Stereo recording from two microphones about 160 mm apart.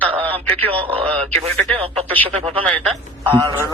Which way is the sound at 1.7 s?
35° right (ahead or behind).